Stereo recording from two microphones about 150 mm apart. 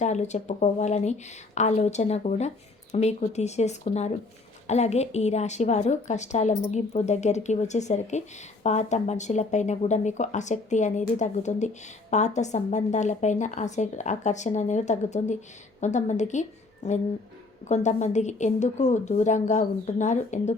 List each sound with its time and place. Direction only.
0.0 s a woman's voice: 50° left (ahead or behind)